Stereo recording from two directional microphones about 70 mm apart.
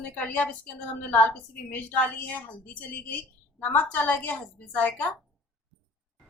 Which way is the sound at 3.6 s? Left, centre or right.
Centre.